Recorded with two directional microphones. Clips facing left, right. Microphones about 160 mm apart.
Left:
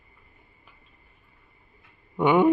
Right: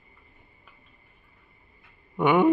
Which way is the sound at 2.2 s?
15° left (ahead or behind).